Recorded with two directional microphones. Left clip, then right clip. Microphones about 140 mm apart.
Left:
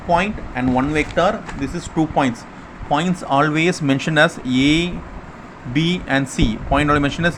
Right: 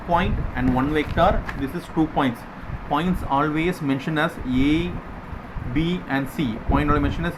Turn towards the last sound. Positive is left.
turn(degrees=60)  # may be behind; listen again after turning